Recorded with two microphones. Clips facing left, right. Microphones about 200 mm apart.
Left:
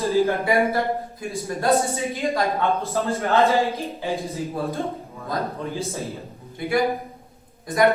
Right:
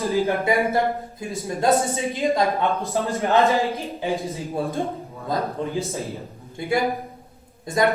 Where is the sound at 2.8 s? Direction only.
15° right (ahead or behind).